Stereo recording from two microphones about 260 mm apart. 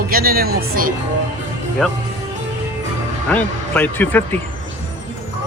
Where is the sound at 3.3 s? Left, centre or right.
Centre.